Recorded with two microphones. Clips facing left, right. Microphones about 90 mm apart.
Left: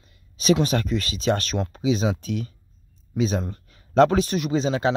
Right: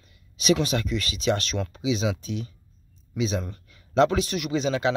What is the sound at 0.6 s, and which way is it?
A man's voice, 40° left (ahead or behind).